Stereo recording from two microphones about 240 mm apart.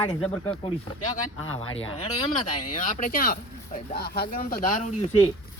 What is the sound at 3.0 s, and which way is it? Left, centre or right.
Speech, left.